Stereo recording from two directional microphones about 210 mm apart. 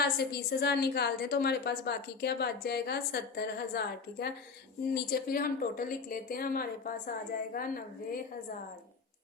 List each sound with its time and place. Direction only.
0.0 s a woman's voice: 50° left (ahead or behind)